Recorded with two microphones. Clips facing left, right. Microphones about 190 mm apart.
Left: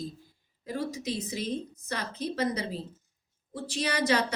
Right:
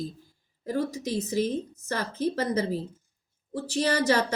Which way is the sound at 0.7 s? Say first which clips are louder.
Right 4 dB; 45° right (ahead or behind).